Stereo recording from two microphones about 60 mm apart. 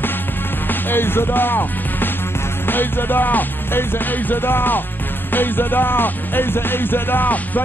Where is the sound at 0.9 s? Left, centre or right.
Left.